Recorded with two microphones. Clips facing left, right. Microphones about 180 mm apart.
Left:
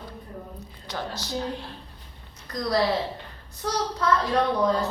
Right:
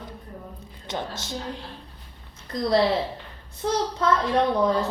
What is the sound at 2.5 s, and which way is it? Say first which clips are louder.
A woman's voice: right 3 dB; 25° right (ahead or behind).